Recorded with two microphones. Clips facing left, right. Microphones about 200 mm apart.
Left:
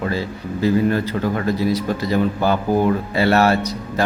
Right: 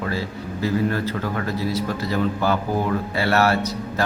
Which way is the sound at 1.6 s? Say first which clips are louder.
Left 4 dB; 15° left (ahead or behind).